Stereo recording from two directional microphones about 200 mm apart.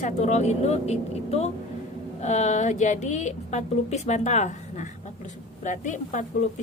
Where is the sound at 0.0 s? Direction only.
35° left (ahead or behind).